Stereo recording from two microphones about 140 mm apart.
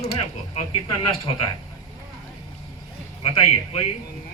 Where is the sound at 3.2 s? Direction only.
40° left (ahead or behind).